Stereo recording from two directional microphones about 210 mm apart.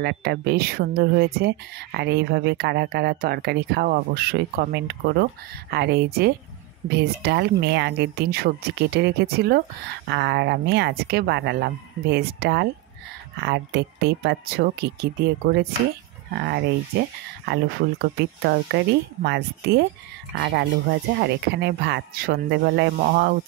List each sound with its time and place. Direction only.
0.0 s speech: 50° right (ahead or behind)